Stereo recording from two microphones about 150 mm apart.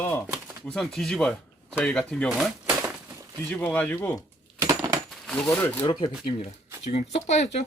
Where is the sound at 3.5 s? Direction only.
10° left (ahead or behind).